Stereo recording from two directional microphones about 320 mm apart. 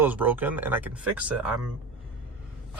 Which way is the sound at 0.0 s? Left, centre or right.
Centre.